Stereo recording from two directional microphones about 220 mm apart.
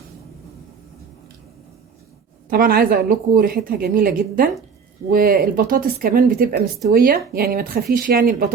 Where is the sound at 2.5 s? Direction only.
45° right (ahead or behind).